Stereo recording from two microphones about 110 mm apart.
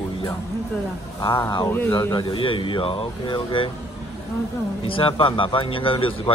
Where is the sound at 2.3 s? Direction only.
50° left (ahead or behind).